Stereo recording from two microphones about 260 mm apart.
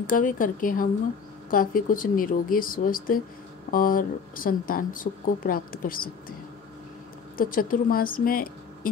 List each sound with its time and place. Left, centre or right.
0.0 s speech: left
7.3 s a woman's voice: left